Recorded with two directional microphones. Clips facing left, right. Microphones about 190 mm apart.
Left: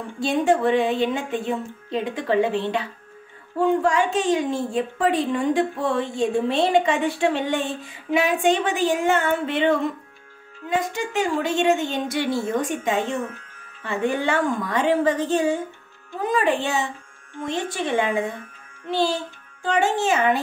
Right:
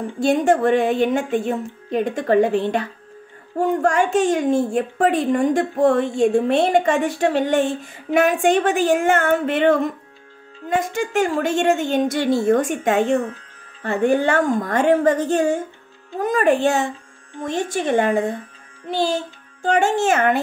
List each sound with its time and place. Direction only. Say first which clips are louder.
0.2 s a woman's voice: right 3 dB; 50° right (ahead or behind)
19.6 s a woman's voice: right 3 dB; 45° right (ahead or behind)